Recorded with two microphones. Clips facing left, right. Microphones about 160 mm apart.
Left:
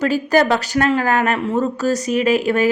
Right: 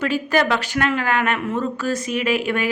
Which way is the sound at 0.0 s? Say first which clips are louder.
Left 4 dB; 40° left (ahead or behind).